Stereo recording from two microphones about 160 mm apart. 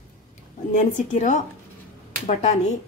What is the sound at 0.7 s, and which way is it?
Speech, 50° left (ahead or behind).